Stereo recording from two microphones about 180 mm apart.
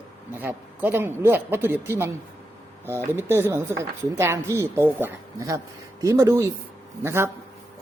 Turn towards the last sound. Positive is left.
turn(degrees=-15)  # may be behind; listen again after turning